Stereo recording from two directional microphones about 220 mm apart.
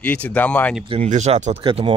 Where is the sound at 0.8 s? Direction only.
25° right (ahead or behind).